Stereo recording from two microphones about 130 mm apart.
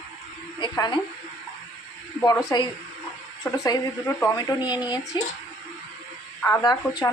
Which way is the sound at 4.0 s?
15° left (ahead or behind).